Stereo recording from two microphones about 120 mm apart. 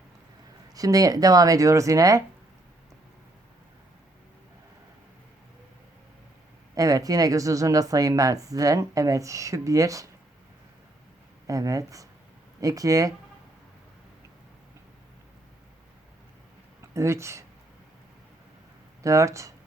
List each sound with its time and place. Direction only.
0.7 s speech: 30° right (ahead or behind)
6.7 s speech: 30° right (ahead or behind)
11.4 s speech: 30° right (ahead or behind)
16.8 s speech: 25° right (ahead or behind)
19.0 s speech: 25° right (ahead or behind)